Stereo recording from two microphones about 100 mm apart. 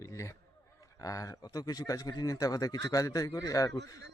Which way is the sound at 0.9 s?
35° left (ahead or behind).